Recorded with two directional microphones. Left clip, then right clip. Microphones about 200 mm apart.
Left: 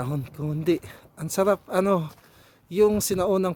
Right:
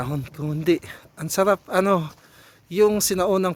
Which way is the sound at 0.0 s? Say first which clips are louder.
Right 2 dB; 5° left (ahead or behind).